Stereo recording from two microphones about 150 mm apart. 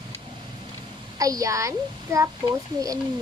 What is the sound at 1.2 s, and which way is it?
A woman's voice, 25° right (ahead or behind).